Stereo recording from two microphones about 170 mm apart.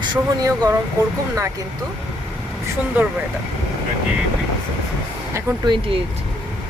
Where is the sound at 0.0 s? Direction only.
25° right (ahead or behind).